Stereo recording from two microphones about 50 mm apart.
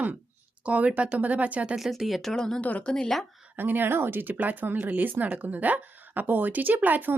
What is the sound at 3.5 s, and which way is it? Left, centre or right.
Speech, right.